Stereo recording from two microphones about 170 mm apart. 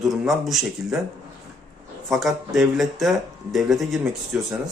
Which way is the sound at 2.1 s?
Centre (ahead or behind).